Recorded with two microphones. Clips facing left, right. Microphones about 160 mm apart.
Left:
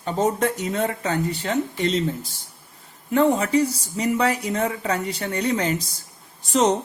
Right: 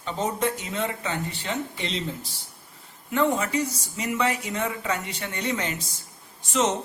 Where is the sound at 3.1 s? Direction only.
35° left (ahead or behind).